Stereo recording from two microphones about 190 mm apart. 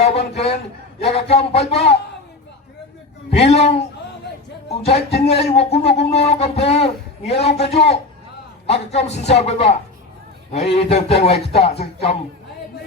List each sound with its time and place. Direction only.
0.0 s a sound: 35° left (ahead or behind)
1.0 s a man's voice: 30° left (ahead or behind)
3.3 s a man's voice: 30° left (ahead or behind)